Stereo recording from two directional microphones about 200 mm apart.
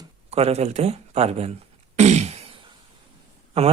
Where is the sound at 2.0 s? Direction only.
35° right (ahead or behind).